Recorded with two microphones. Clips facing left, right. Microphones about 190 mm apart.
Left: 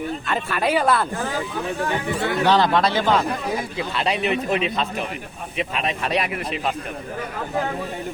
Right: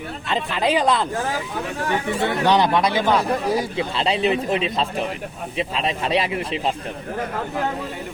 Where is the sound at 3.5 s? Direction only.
30° right (ahead or behind).